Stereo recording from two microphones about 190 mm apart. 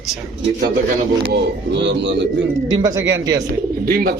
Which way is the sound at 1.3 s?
70° right (ahead or behind).